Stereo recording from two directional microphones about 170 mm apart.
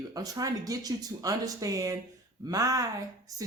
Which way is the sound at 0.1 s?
20° right (ahead or behind).